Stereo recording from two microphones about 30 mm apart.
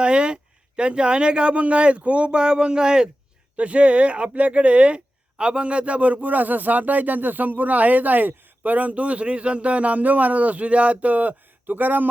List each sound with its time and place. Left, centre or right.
0.0 s a sound: right
0.8 s speech: right
1.5 s speech: right
3.6 s speech: right
11.1 s speech: right